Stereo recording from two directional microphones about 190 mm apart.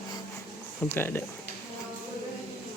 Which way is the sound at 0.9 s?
10° left (ahead or behind).